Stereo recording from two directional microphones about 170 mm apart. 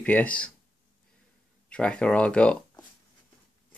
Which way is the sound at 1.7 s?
5° left (ahead or behind).